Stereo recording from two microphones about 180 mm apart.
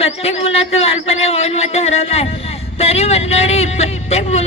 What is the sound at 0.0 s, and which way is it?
A man's voice, 35° left (ahead or behind).